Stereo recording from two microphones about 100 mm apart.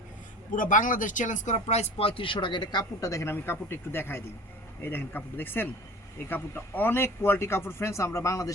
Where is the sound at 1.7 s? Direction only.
90° left.